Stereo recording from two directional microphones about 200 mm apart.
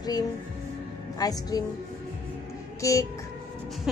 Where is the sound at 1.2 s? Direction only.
20° left (ahead or behind).